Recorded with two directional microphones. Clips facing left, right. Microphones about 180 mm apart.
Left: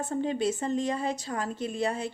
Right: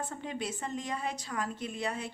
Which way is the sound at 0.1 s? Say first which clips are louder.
Left 10 dB; 30° left (ahead or behind).